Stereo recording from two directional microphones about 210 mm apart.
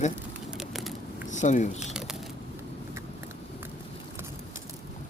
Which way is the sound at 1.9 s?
Centre (ahead or behind).